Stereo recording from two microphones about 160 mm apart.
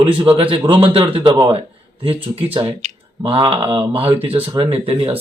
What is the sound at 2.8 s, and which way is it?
Speech, 35° right (ahead or behind).